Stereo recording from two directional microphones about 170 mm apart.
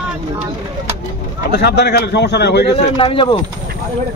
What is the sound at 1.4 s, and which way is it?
Speech, 70° left (ahead or behind).